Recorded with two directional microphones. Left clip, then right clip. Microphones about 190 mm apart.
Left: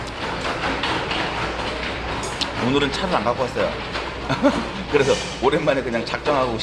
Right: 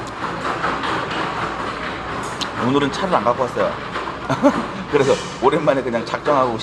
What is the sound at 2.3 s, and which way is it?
Speech, 10° right (ahead or behind).